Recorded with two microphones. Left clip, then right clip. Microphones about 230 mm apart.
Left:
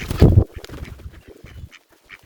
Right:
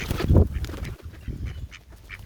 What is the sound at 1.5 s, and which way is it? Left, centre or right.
Duck, centre.